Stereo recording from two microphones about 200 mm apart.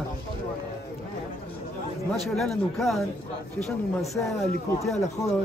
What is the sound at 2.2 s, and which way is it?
Speech, centre (ahead or behind).